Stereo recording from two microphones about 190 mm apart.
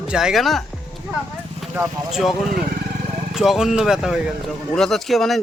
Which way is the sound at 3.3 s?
Centre (ahead or behind).